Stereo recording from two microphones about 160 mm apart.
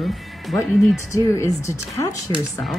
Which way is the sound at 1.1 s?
20° left (ahead or behind).